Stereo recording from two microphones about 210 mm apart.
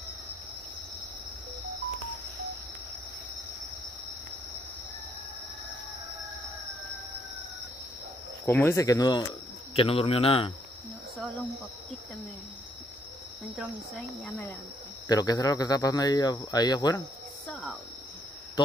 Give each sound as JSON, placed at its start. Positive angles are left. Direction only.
{"t": 8.5, "sound": "speech", "side_deg": 10}
{"t": 9.8, "sound": "a man's voice", "side_deg": 25}
{"t": 13.6, "sound": "cricket", "side_deg": 5}
{"t": 15.0, "sound": "speech", "side_deg": 20}